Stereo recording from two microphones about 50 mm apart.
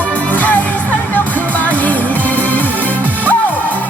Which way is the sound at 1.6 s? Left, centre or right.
Left.